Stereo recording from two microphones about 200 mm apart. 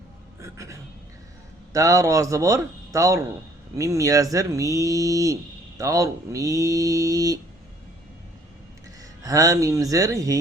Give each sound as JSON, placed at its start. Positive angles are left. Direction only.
{"t": 0.4, "sound": "music", "side_deg": -15}
{"t": 1.7, "sound": "speech", "side_deg": -15}
{"t": 9.2, "sound": "speech", "side_deg": -15}